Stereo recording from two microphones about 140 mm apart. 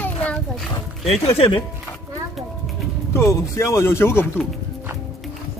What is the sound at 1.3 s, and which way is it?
Speech, 40° left (ahead or behind).